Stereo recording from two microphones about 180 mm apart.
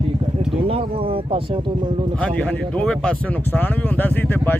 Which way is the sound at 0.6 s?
30° right (ahead or behind).